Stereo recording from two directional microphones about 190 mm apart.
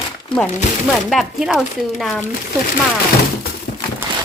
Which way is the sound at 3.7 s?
45° left (ahead or behind).